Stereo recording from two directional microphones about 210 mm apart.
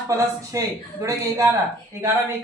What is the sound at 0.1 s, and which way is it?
Speech, 15° right (ahead or behind).